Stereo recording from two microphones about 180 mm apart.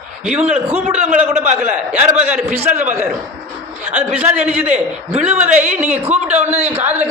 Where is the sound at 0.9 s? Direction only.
40° right (ahead or behind).